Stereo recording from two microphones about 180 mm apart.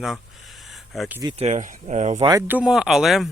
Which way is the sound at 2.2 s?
15° right (ahead or behind).